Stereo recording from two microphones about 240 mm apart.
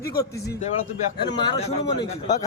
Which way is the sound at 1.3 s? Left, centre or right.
Centre.